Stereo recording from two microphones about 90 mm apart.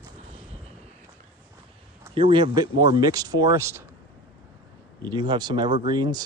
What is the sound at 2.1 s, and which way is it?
Speech, 65° right (ahead or behind).